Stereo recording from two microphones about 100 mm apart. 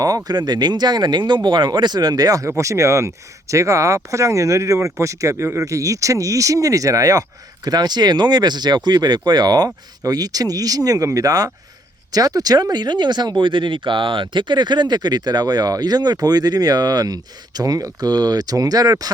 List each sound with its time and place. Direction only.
0.3 s speech: 45° right (ahead or behind)